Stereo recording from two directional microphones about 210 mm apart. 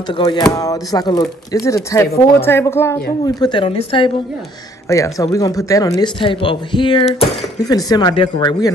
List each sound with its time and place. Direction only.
0.2 s a woman's voice: 20° left (ahead or behind)
4.8 s a woman's voice: 15° left (ahead or behind)